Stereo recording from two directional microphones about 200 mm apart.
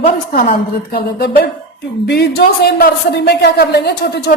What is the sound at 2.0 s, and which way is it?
A man's voice, 55° left (ahead or behind).